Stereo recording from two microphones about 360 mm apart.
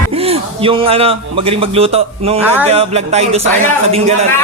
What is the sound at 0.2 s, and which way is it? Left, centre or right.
A man's voice, centre.